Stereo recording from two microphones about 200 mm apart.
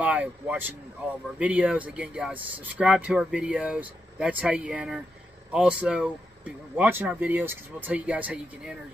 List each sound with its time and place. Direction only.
0.0 s speech: 5° right (ahead or behind)